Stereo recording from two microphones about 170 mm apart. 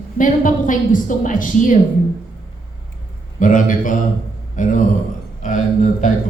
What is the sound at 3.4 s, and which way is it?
A woman's voice, 50° left (ahead or behind).